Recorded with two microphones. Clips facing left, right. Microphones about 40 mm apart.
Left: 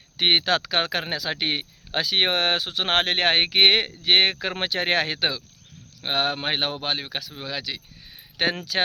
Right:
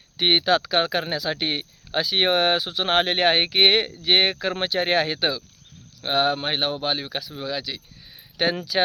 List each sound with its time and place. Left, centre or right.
0.2 s speech: left
4.6 s speech: left
6.0 s speech: left
6.5 s speech: left
7.0 s speech: left
7.6 s a sound: left